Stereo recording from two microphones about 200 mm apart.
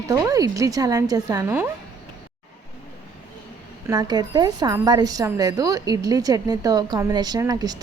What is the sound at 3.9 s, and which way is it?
A woman's voice, 20° right (ahead or behind).